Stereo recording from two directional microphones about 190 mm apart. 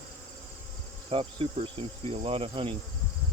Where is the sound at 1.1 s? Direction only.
30° right (ahead or behind).